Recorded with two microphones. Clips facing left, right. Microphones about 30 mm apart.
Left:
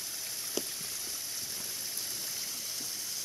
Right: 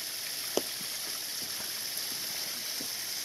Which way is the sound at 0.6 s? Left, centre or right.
Centre.